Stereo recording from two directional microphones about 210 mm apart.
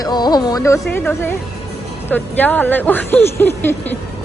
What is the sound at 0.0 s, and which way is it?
Music, 20° left (ahead or behind).